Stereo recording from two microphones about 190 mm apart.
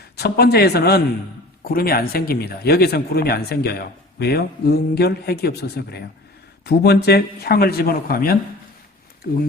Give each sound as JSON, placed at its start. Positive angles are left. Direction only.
{"t": 0.0, "sound": "a man's voice", "side_deg": 60}